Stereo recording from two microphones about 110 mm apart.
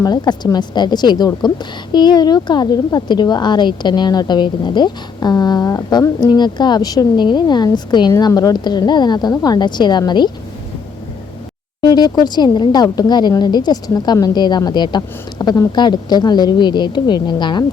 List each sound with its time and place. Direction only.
0.0 s a woman's voice: 35° left (ahead or behind)
8.1 s a woman's voice: 30° left (ahead or behind)
11.8 s a woman's voice: 40° left (ahead or behind)